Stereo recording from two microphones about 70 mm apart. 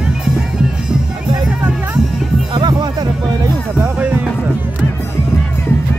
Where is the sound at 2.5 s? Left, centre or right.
Right.